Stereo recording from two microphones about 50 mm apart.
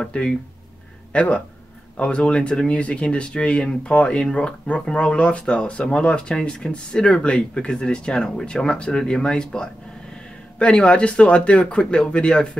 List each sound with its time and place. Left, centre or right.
0.0 s speech: centre
1.1 s speech: left
10.9 s speech: left